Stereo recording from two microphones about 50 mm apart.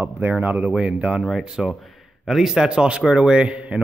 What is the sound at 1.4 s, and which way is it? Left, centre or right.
Speech, centre.